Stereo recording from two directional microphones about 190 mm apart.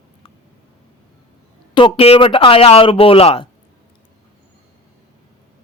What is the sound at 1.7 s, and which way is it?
A man's voice, 25° left (ahead or behind).